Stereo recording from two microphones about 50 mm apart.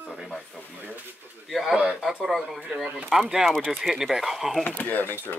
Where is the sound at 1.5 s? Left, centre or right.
Centre.